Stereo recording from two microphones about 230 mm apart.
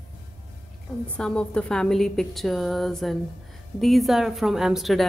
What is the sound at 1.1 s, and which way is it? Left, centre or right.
A woman's voice, centre.